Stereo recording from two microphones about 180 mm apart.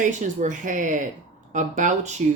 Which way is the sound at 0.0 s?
45° right (ahead or behind).